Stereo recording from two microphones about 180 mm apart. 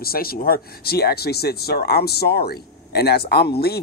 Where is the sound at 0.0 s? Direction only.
55° left (ahead or behind).